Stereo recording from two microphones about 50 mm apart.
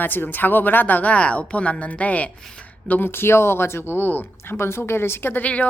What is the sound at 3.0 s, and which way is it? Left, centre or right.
Speech, left.